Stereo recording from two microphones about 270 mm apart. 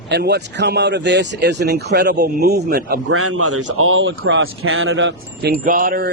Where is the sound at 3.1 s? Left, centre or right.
Right.